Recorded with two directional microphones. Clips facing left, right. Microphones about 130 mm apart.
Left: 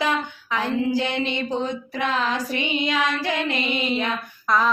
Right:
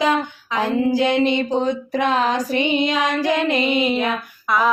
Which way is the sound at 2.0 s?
20° right (ahead or behind).